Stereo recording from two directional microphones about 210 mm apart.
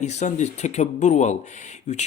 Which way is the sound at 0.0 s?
35° left (ahead or behind).